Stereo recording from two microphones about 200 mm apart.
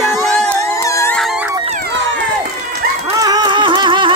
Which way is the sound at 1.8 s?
65° right (ahead or behind).